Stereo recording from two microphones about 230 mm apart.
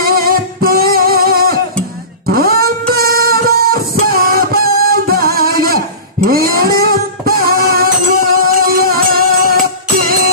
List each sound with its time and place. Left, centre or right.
0.0 s music: right
2.2 s a sound: right
2.9 s music: right